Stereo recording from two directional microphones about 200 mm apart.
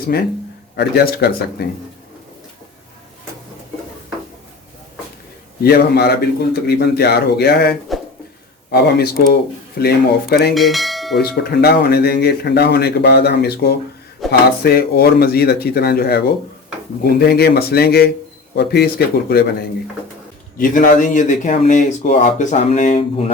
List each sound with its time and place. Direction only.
0.1 s speech: 50° left (ahead or behind)
5.6 s speech: 50° left (ahead or behind)
10.5 s bell: centre (ahead or behind)
11.2 s speech: 55° left (ahead or behind); by 23.2 s 35° left (ahead or behind)